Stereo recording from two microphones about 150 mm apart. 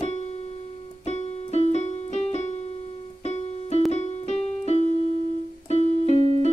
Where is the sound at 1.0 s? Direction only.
50° left (ahead or behind).